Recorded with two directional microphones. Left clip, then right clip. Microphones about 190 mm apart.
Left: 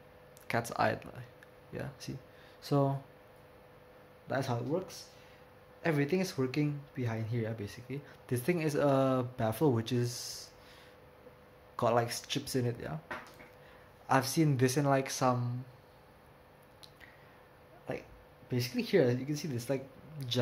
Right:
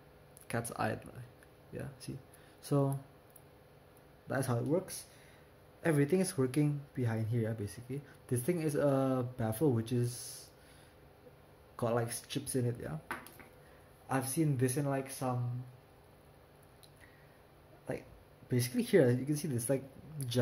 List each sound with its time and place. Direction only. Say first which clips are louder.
0.5 s speech: left 5 dB; centre (ahead or behind)
4.3 s speech: left 2 dB; 15° right (ahead or behind)
5.8 s speech: even; 15° right (ahead or behind)
11.7 s speech: left 5 dB; centre (ahead or behind)
14.0 s speech: left 6 dB; 5° left (ahead or behind)
18.5 s speech: right 1 dB; 15° right (ahead or behind)